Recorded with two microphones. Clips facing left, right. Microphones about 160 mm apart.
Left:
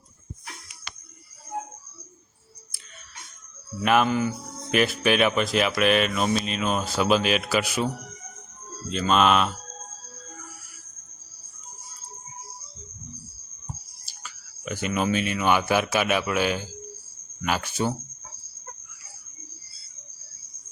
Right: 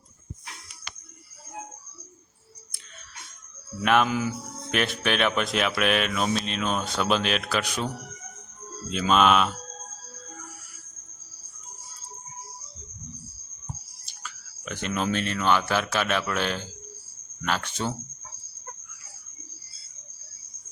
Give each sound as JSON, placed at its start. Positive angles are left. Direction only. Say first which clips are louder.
{"t": 3.8, "sound": "speech", "louder": "left 1 dB", "side_deg": 0}
{"t": 8.9, "sound": "speech", "louder": "even", "side_deg": 0}
{"t": 14.0, "sound": "speech", "louder": "right 2 dB", "side_deg": 5}